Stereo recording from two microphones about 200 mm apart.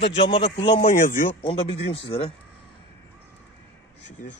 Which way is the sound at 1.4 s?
30° left (ahead or behind).